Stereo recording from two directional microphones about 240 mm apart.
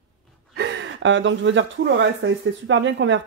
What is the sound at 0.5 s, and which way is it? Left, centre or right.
Speech, right.